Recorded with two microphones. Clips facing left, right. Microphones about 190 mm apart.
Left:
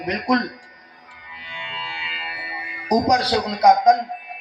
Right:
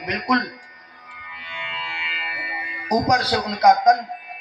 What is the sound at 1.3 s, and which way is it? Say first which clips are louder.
Music: even; 35° left (ahead or behind).